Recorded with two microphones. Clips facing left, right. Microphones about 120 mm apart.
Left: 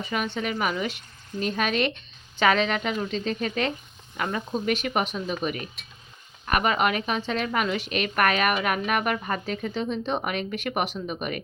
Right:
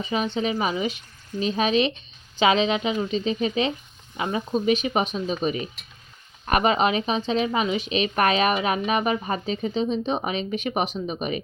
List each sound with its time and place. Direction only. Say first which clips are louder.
0.0 s speech: right 4 dB; 20° right (ahead or behind)